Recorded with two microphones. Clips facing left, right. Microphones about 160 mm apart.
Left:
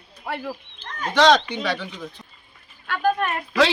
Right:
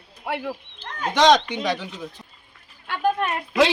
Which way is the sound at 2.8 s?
25° right (ahead or behind).